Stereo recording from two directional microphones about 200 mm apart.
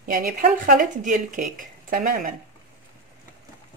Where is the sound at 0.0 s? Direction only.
45° right (ahead or behind).